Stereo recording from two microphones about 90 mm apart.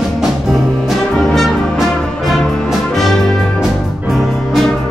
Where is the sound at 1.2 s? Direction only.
Centre (ahead or behind).